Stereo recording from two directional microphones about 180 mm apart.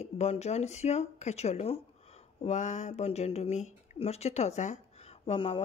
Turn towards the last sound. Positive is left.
turn(degrees=30)  # may be behind; listen again after turning